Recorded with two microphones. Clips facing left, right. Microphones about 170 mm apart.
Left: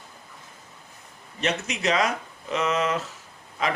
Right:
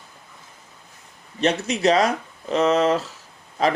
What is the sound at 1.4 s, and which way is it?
Speech, 35° right (ahead or behind).